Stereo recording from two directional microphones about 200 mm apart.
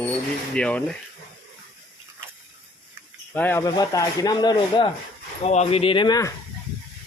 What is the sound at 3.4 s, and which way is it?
Speech, 10° left (ahead or behind).